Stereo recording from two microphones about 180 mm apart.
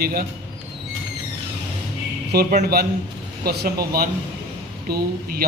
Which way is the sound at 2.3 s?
55° right (ahead or behind).